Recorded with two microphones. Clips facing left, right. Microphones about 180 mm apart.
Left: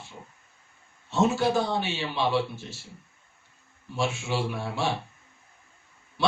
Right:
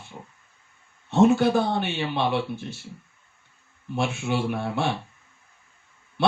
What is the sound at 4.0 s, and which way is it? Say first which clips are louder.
Speech: right 2 dB; 55° right (ahead or behind).